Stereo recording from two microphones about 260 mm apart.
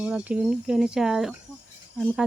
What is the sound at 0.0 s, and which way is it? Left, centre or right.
Speech, centre.